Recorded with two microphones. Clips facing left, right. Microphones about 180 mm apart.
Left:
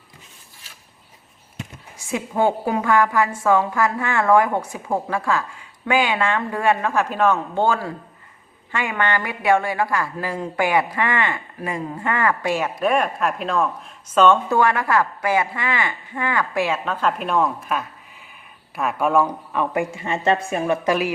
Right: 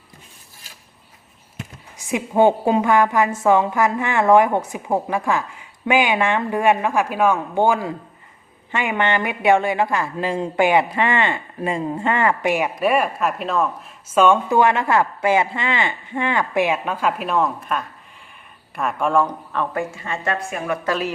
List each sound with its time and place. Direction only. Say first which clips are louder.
2.0 s a woman's voice: right 5 dB; 15° right (ahead or behind); by 20.7 s 30° left (ahead or behind)
20.8 s a woman's voice: left 2 dB; 15° left (ahead or behind)